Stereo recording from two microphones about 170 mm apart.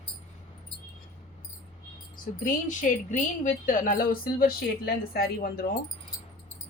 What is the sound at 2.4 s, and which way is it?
Speech, 50° left (ahead or behind).